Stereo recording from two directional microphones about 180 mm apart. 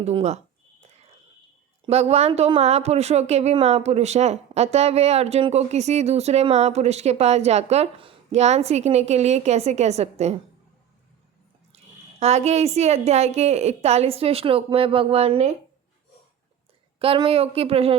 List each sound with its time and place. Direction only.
0.0 s speech: 35° right (ahead or behind)
1.9 s speech: 35° right (ahead or behind)
12.2 s speech: 35° right (ahead or behind)
17.0 s speech: 30° right (ahead or behind)